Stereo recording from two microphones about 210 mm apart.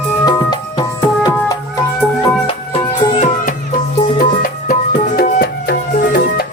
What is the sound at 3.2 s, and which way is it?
Music, 40° left (ahead or behind).